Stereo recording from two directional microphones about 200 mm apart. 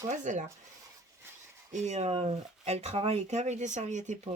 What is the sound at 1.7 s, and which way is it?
Speech, 35° right (ahead or behind).